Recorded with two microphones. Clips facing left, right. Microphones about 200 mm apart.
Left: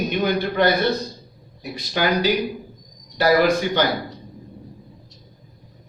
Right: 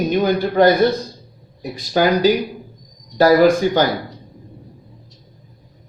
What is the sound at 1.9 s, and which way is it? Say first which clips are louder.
A man's voice: right 6 dB; 45° right (ahead or behind).